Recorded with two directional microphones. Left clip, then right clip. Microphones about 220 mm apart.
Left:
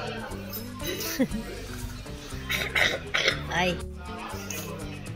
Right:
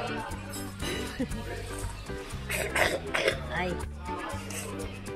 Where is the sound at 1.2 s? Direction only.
30° left (ahead or behind).